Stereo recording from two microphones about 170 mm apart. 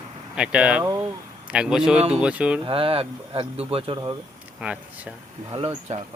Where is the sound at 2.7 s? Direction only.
35° right (ahead or behind).